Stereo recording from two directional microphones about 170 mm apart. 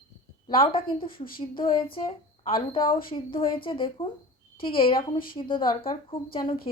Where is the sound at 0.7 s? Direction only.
30° left (ahead or behind).